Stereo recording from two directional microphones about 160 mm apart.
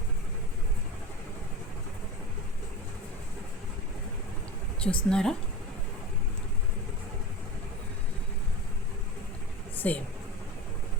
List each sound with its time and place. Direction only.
4.8 s speech: 5° left (ahead or behind)
9.7 s speech: 10° left (ahead or behind)